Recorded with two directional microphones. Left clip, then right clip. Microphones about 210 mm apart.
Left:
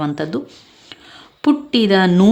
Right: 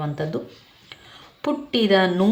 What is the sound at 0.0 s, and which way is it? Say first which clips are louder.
A woman's voice: left 6 dB; 45° left (ahead or behind).